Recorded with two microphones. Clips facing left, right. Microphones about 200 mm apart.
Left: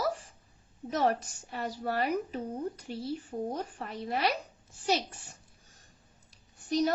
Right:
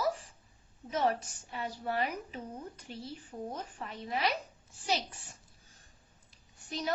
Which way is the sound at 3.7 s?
45° left (ahead or behind).